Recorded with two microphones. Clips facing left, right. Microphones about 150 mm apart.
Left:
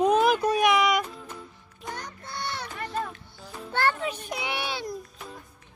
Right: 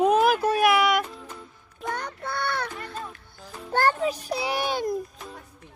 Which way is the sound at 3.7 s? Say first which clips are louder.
Right 4 dB; 40° right (ahead or behind).